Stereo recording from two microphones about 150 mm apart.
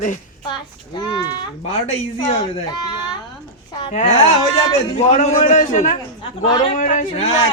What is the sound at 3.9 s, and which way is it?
A man's voice, 50° left (ahead or behind).